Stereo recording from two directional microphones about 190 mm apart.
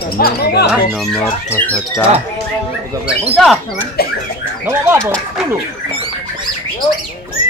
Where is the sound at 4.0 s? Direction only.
55° left (ahead or behind).